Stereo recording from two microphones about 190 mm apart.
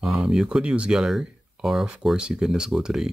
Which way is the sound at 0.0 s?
5° right (ahead or behind).